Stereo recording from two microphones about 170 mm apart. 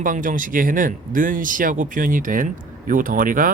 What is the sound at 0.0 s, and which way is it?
Speech, 50° right (ahead or behind).